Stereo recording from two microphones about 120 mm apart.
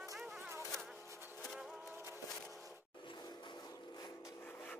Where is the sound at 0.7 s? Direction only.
Centre (ahead or behind).